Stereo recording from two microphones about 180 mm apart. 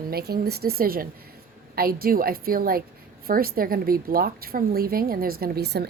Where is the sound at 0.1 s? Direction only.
60° right (ahead or behind).